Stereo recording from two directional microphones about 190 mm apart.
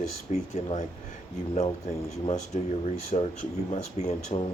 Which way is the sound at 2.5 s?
35° left (ahead or behind).